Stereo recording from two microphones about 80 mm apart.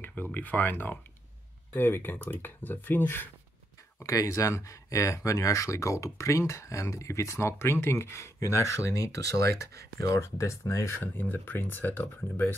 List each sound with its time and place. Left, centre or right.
0.0 s speech: left
4.0 s speech: left
11.0 s speech: left